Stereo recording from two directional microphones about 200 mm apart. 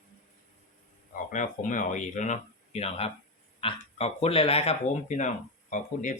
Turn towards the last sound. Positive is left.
turn(degrees=40)  # may be behind; listen again after turning